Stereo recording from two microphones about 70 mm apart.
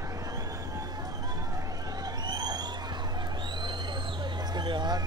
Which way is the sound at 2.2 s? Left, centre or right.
Right.